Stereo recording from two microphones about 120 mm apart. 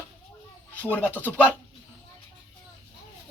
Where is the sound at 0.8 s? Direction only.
15° left (ahead or behind).